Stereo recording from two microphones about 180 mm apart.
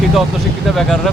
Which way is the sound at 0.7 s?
Centre (ahead or behind).